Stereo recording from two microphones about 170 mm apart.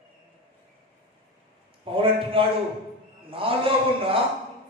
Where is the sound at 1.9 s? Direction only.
30° right (ahead or behind).